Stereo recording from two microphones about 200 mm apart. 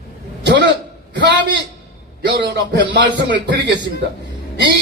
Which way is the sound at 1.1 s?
60° right (ahead or behind).